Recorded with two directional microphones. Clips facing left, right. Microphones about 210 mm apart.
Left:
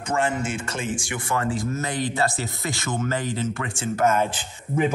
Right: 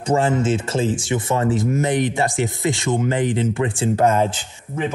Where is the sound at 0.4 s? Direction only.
25° right (ahead or behind).